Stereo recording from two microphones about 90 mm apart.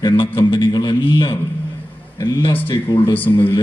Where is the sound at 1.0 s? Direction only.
70° left (ahead or behind).